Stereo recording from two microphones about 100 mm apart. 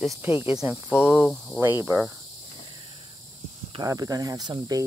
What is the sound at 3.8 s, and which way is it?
Speech, 40° right (ahead or behind).